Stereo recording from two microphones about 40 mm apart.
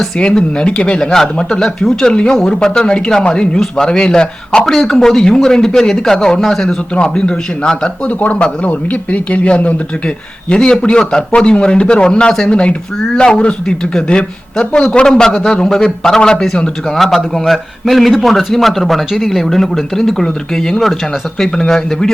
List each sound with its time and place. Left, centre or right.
0.2 s speech: left
1.0 s speech: centre
4.6 s speech: centre
6.7 s speech: left
8.0 s speech: left
10.5 s speech: left
16.9 s speech: centre